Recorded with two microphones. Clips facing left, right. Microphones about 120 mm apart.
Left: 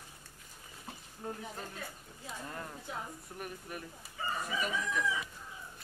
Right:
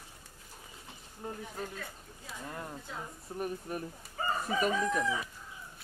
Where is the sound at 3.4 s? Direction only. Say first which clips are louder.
Right 8 dB; 35° right (ahead or behind).